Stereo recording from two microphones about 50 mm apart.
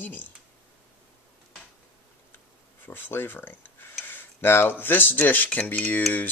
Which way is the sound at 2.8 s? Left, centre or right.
Left.